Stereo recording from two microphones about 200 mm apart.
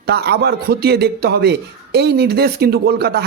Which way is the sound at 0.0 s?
55° right (ahead or behind).